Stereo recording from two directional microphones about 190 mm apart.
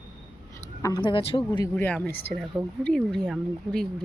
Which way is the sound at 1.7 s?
10° left (ahead or behind).